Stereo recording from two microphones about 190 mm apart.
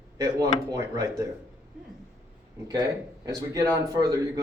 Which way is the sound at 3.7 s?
20° right (ahead or behind).